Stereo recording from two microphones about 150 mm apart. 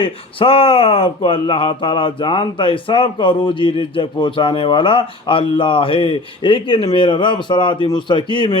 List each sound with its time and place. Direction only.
0.0 s speech: 35° left (ahead or behind)